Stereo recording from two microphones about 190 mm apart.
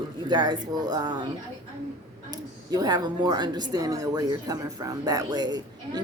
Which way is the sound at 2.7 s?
20° right (ahead or behind).